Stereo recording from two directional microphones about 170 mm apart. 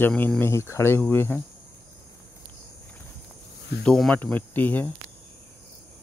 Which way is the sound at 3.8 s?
5° left (ahead or behind).